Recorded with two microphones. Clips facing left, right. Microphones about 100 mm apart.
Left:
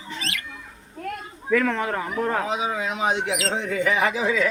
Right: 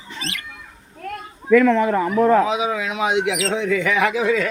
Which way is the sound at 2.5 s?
90° right.